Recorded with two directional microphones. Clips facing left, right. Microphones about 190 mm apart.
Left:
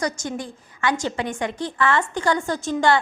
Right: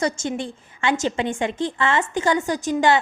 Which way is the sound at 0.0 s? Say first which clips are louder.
Right 3 dB; 25° right (ahead or behind).